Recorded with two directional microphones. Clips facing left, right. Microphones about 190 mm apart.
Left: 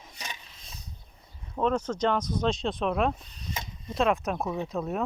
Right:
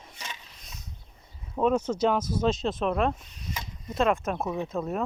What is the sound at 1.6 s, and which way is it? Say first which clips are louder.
Speech: right 2 dB; 10° right (ahead or behind).